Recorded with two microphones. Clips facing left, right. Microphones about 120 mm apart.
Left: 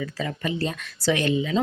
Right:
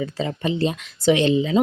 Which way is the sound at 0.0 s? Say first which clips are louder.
Right 4 dB; 25° right (ahead or behind).